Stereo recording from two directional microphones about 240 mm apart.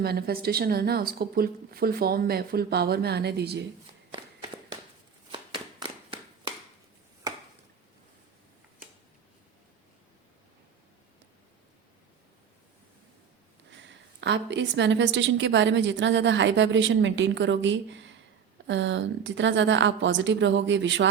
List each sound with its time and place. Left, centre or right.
0.0 s a woman's voice: right
5.3 s a sound: right
13.7 s a woman's voice: right